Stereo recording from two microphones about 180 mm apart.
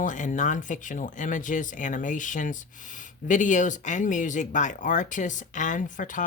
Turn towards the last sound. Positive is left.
turn(degrees=45)  # may be behind; listen again after turning